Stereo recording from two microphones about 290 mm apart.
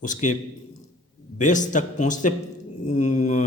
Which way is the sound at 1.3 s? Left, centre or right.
Left.